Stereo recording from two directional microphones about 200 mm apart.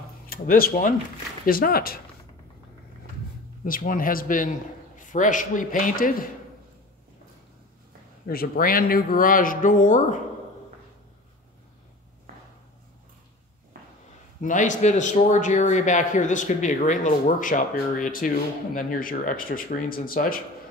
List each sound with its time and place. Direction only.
0.3 s speech: 45° left (ahead or behind)
3.6 s a man's voice: 45° left (ahead or behind)
8.3 s speech: 45° left (ahead or behind)
13.7 s a sound: 45° right (ahead or behind)
14.4 s speech: 40° left (ahead or behind)